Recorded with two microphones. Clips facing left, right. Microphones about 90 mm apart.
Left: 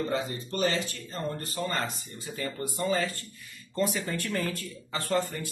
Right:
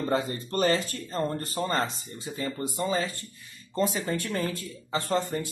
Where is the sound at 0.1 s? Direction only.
45° right (ahead or behind).